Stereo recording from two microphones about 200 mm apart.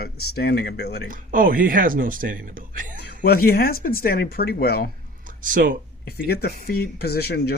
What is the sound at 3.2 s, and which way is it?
Speech, 50° left (ahead or behind).